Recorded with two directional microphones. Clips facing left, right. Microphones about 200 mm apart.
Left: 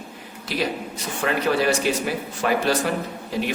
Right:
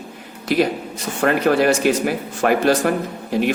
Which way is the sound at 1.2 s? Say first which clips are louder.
Right 5 dB; 50° right (ahead or behind).